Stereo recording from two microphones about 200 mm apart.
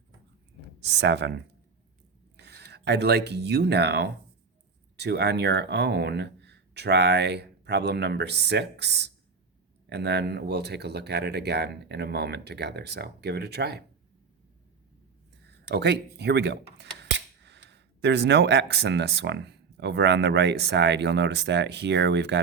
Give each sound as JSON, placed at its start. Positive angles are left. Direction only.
{"t": 0.8, "sound": "speech", "side_deg": -60}
{"t": 15.4, "sound": "speech", "side_deg": -55}